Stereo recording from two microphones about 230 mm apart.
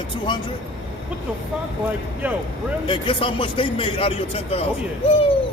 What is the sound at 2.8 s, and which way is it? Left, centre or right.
A man's voice, left.